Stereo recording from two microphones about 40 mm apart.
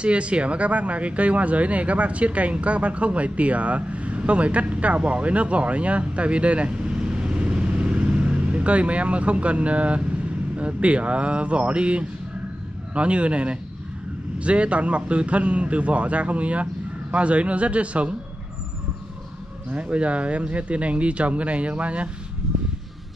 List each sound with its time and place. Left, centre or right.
0.0 s speech: right
19.7 s speech: right